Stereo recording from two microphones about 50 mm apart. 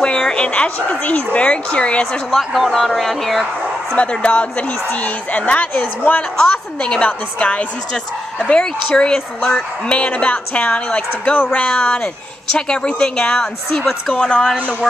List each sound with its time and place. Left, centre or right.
0.0 s speech: centre
2.3 s speech: centre
3.9 s a woman's voice: left
6.8 s speech: left
11.5 s a woman's voice: left
12.5 s a woman's voice: centre